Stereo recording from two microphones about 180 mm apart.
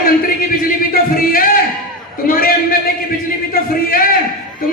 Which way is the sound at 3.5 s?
55° left (ahead or behind).